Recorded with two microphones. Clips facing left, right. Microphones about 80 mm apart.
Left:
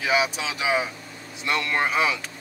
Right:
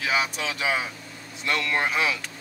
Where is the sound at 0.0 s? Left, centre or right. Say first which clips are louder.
Left 3 dB; centre.